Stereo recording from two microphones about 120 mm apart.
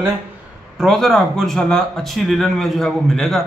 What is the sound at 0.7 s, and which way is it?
A man's voice, centre (ahead or behind).